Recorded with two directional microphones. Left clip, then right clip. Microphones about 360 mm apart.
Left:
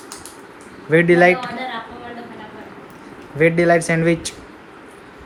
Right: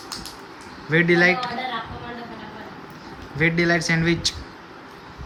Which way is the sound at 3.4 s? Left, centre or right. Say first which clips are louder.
Left 6 dB; centre.